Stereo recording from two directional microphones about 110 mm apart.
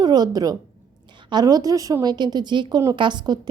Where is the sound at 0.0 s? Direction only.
40° right (ahead or behind).